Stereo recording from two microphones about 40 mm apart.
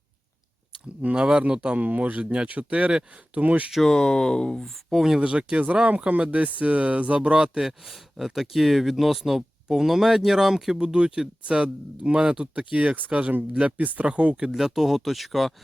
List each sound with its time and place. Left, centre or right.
1.0 s speech: right
1.8 s speech: right
3.8 s speech: centre
4.6 s speech: centre
5.2 s speech: right
7.2 s speech: right
7.6 s speech: centre
10.8 s speech: right
14.5 s speech: centre